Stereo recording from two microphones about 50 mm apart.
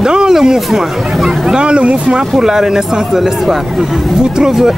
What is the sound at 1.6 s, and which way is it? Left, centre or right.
Speech, right.